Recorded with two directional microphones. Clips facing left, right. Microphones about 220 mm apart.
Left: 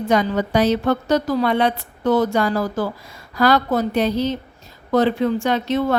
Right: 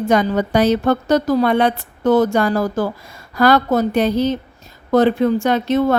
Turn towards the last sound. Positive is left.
turn(degrees=-45)  # may be behind; listen again after turning